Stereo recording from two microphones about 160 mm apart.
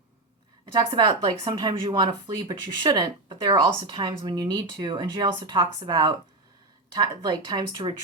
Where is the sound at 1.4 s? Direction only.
30° right (ahead or behind).